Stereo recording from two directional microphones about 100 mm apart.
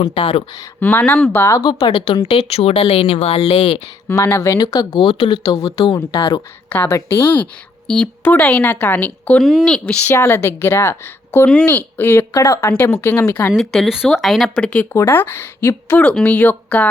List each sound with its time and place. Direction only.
0.0 s speech: 65° left (ahead or behind)
0.8 s a woman's voice: 20° left (ahead or behind)
1.6 s speech: 50° left (ahead or behind)
2.2 s speech: 80° left
4.1 s a woman's voice: 25° left (ahead or behind)
4.6 s speech: 40° left (ahead or behind)
5.7 s a woman's voice: 55° left (ahead or behind)
6.7 s a woman's voice: 20° left (ahead or behind)
7.9 s a woman's voice: 5° left (ahead or behind)
9.4 s a woman's voice: centre (ahead or behind)
10.1 s a woman's voice: 25° left (ahead or behind)
13.6 s speech: centre (ahead or behind)
14.9 s a woman's voice: 20° left (ahead or behind)